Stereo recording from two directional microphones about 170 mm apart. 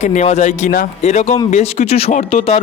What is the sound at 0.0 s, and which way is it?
A man's voice, 45° left (ahead or behind).